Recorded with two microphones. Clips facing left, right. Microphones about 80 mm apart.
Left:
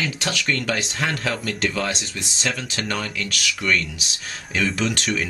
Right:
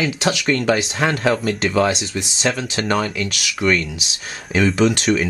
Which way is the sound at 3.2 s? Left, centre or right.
Centre.